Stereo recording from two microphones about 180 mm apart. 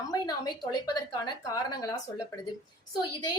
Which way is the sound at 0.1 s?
20° left (ahead or behind).